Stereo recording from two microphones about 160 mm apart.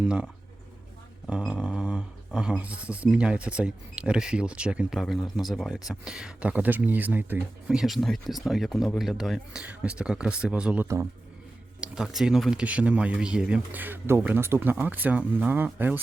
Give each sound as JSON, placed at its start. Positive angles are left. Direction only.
{"t": 0.0, "sound": "speech", "side_deg": -5}
{"t": 1.3, "sound": "speech", "side_deg": 0}
{"t": 10.8, "sound": "speech", "side_deg": -15}
{"t": 11.8, "sound": "speech", "side_deg": -5}